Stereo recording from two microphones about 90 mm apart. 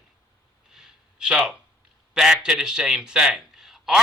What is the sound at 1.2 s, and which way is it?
A man's voice, 10° right (ahead or behind).